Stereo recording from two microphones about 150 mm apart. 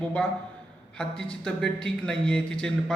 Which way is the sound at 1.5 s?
5° left (ahead or behind).